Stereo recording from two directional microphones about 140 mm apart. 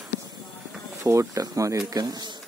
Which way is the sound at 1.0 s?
20° right (ahead or behind).